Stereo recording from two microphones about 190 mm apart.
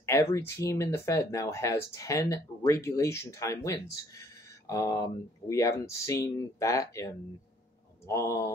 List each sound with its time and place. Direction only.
0.0 s speech: 15° left (ahead or behind)
8.1 s speech: 15° left (ahead or behind)